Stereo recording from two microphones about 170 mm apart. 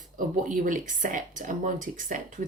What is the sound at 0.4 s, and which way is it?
Speech, 50° right (ahead or behind).